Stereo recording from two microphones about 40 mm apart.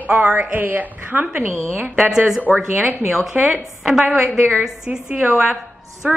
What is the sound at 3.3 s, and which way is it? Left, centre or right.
Speech, right.